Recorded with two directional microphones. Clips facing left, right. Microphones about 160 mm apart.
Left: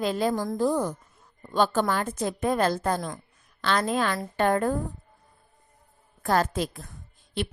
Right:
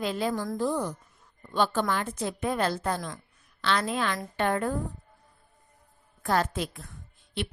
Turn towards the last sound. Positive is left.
turn(degrees=40)  # may be behind; listen again after turning